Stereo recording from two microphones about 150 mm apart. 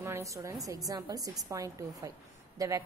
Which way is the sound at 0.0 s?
20° right (ahead or behind).